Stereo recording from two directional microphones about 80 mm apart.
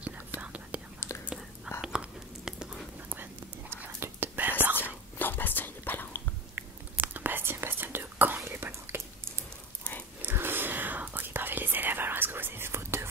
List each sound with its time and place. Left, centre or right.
0.4 s whispering: centre
1.1 s whispering: left
1.8 s whispering: centre
3.7 s whispering: right
4.7 s whispering: left
6.5 s whispering: right